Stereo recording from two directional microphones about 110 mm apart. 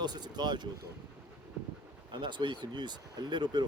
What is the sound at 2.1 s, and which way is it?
Speech, 45° right (ahead or behind).